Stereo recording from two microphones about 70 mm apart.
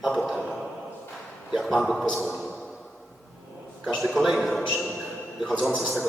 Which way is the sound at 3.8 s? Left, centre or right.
Centre.